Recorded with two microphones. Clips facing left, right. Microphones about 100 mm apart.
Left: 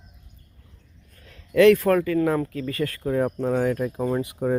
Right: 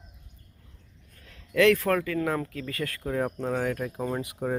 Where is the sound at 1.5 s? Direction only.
10° left (ahead or behind).